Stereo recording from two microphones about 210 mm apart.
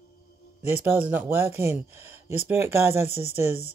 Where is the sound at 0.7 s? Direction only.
10° right (ahead or behind).